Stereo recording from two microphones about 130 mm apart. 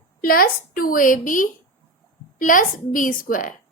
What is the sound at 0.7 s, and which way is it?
A woman's voice, 90° left.